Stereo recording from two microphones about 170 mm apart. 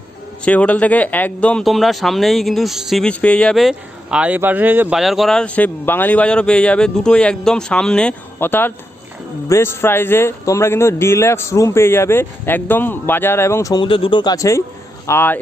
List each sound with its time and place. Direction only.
0.4 s speech: 10° left (ahead or behind)
13.8 s speech: 30° left (ahead or behind); by 15.4 s 15° left (ahead or behind)